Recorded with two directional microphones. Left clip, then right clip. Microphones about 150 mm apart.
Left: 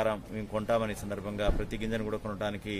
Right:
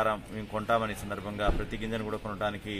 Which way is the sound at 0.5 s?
30° left (ahead or behind).